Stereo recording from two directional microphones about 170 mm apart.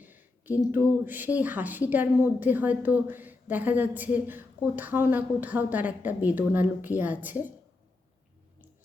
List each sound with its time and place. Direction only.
0.0 s a woman's voice: 10° right (ahead or behind)